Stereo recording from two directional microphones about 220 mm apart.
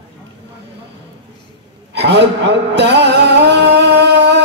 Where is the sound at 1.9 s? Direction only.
50° right (ahead or behind).